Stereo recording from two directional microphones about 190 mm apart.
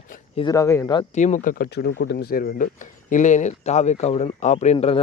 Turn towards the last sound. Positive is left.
turn(degrees=30)  # may be behind; listen again after turning